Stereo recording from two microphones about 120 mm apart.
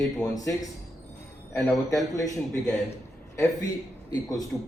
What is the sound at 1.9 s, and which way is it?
Speech, 30° left (ahead or behind).